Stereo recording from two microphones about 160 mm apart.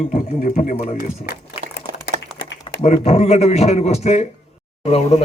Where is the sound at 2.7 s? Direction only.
30° left (ahead or behind).